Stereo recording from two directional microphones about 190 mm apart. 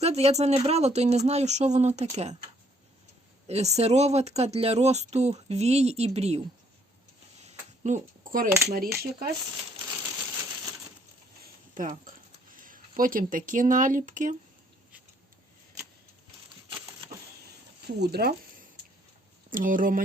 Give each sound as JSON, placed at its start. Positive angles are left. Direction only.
{"t": 0.0, "sound": "speech", "side_deg": -35}
{"t": 3.4, "sound": "speech", "side_deg": -35}
{"t": 7.4, "sound": "a sound", "side_deg": -40}
{"t": 9.0, "sound": "speech", "side_deg": -55}
{"t": 9.9, "sound": "typewriter", "side_deg": -10}
{"t": 11.4, "sound": "a sound", "side_deg": -45}
{"t": 13.0, "sound": "speech", "side_deg": -45}
{"t": 17.8, "sound": "speech", "side_deg": -60}
{"t": 19.5, "sound": "speech", "side_deg": -45}